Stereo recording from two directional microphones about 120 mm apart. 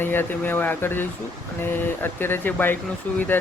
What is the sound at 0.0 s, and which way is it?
Speech, 15° left (ahead or behind).